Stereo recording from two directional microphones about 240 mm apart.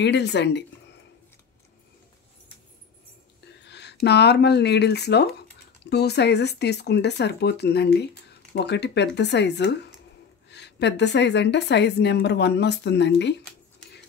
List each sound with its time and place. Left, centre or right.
0.0 s speech: left
3.6 s speech: left